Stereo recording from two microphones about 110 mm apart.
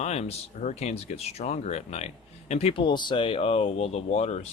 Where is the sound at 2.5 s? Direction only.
65° left (ahead or behind).